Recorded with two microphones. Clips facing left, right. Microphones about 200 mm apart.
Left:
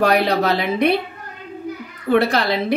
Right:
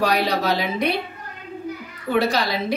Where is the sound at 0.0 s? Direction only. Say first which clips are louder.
Left 4 dB; 55° left (ahead or behind).